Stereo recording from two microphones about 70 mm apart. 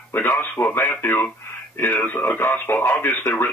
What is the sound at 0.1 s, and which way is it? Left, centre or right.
Speech, left.